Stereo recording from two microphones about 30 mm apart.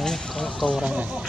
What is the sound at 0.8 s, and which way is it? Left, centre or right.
Speech, right.